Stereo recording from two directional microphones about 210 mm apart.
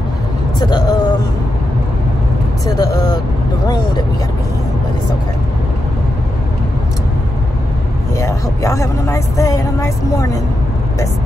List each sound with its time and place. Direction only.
0.6 s speech: 20° left (ahead or behind)
2.6 s speech: 20° left (ahead or behind)
8.2 s speech: 15° left (ahead or behind)